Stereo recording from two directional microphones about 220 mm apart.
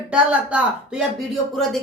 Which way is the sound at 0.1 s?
5° right (ahead or behind).